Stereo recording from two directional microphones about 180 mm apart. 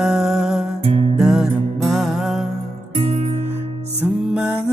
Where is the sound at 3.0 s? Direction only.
35° right (ahead or behind).